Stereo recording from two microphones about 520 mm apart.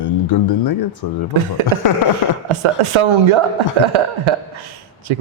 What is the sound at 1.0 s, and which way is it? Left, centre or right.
Speech, left.